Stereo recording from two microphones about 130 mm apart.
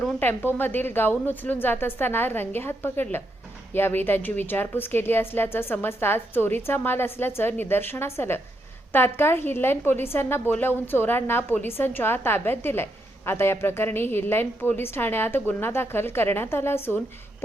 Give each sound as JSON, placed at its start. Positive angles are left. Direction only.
{"t": 0.2, "sound": "a woman's voice", "side_deg": 15}